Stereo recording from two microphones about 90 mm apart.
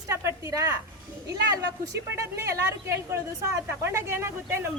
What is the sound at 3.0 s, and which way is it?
A woman's voice, 30° right (ahead or behind).